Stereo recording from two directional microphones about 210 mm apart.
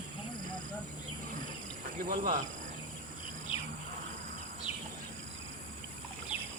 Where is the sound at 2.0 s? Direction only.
40° right (ahead or behind).